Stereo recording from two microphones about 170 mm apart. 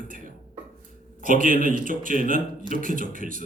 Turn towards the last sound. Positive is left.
turn(degrees=-55)  # may be behind; listen again after turning